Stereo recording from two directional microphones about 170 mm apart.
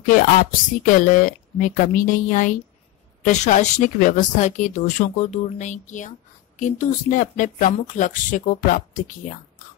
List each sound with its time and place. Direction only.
0.0 s speech: 50° left (ahead or behind)